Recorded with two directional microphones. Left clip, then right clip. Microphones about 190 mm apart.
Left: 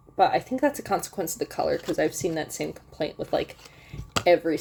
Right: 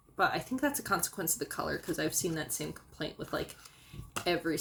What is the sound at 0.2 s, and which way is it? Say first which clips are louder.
Speech: left 9 dB; 25° left (ahead or behind).